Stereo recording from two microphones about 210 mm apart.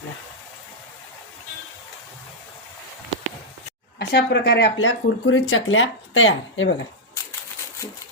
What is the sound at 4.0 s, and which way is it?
Speech, 55° left (ahead or behind).